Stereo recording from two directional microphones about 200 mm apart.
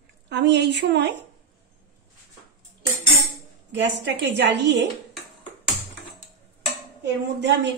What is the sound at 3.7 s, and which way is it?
A woman's voice, 60° right (ahead or behind).